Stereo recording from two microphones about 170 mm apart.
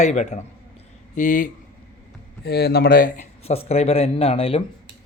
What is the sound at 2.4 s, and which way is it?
Speech, 70° left (ahead or behind).